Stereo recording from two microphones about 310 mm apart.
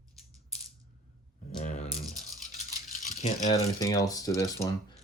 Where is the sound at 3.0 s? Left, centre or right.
Left.